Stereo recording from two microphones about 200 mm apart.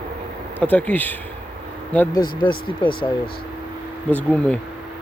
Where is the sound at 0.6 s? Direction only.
5° left (ahead or behind).